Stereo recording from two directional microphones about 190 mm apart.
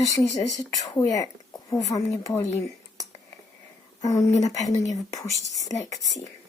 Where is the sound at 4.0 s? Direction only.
20° left (ahead or behind).